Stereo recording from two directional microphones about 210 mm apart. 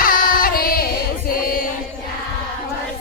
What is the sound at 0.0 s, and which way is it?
Music, 40° left (ahead or behind).